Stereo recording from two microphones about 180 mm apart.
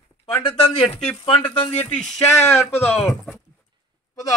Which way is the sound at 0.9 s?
30° left (ahead or behind).